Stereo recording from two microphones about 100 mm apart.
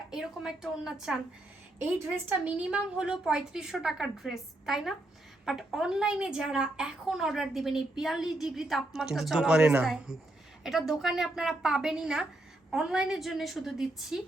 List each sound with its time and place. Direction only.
0.1 s a woman's voice: 5° right (ahead or behind)
1.8 s a woman's voice: 25° right (ahead or behind)
2.3 s a woman's voice: 10° right (ahead or behind)